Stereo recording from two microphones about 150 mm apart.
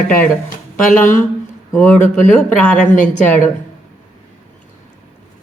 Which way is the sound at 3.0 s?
10° left (ahead or behind).